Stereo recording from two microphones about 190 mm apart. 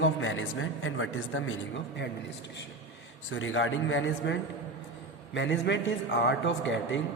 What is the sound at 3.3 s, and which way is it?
A man's voice, 90° left.